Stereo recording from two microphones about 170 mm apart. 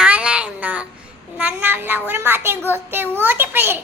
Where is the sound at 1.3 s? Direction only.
10° right (ahead or behind).